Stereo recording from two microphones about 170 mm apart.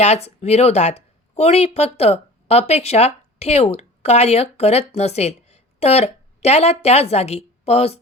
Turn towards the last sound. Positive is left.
turn(degrees=35)  # may be behind; listen again after turning